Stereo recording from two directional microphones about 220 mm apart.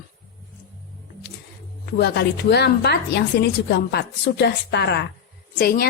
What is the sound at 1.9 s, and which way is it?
A woman's voice, 50° left (ahead or behind).